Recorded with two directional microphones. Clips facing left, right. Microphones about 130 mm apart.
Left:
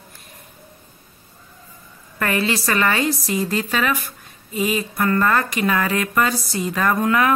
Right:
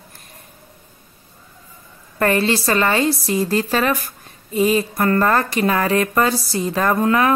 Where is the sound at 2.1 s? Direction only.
35° right (ahead or behind).